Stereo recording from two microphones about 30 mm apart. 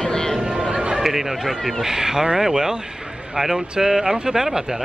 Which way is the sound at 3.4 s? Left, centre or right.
Centre.